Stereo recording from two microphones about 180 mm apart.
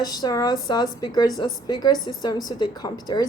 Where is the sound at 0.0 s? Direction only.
20° left (ahead or behind).